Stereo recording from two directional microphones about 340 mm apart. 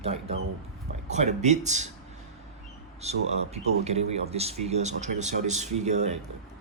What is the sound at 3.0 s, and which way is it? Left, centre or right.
Speech, centre.